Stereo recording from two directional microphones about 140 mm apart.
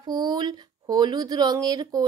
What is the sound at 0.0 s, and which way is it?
A child's voice, 30° right (ahead or behind).